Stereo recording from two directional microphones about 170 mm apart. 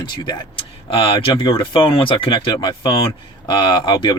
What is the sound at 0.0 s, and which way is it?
Speech, 30° left (ahead or behind).